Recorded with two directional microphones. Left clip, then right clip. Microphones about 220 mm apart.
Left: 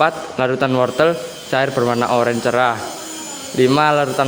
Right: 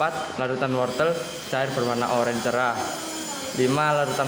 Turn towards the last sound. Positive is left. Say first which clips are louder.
# left 7 dB
turn(degrees=50)  # may be behind; listen again after turning